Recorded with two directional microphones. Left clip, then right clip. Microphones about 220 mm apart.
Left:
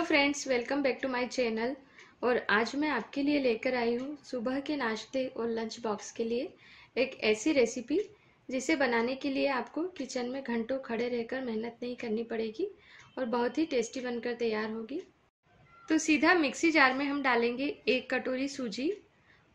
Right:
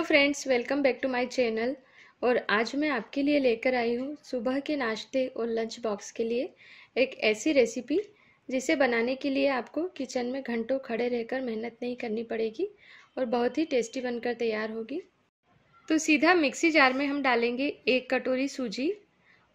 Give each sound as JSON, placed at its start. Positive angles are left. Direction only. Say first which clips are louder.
{"t": 0.0, "sound": "speech", "louder": "right 4 dB", "side_deg": -40}